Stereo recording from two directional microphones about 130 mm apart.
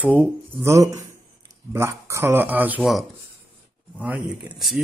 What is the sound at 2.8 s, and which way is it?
Speech, centre (ahead or behind).